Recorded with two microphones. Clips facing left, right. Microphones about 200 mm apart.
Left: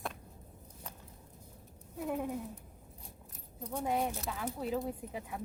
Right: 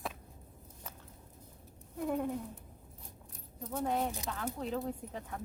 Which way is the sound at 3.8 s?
10° left (ahead or behind).